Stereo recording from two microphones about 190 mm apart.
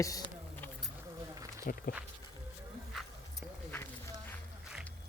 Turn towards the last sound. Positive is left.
turn(degrees=10)  # may be behind; listen again after turning